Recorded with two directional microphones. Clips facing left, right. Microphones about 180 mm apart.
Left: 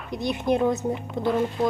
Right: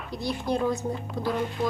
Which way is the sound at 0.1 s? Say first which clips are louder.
Left 4 dB; 20° left (ahead or behind).